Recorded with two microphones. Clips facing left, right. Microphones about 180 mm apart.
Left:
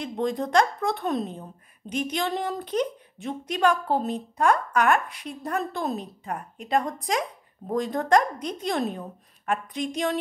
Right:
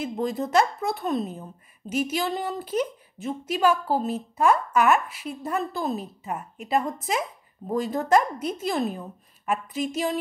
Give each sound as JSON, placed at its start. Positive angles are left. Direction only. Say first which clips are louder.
{"t": 0.0, "sound": "a woman's voice", "louder": "even", "side_deg": -5}